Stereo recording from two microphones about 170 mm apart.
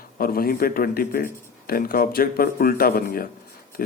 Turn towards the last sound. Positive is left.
turn(degrees=60)  # may be behind; listen again after turning